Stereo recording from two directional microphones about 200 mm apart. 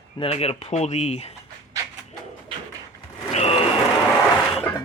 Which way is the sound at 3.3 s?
30° left (ahead or behind).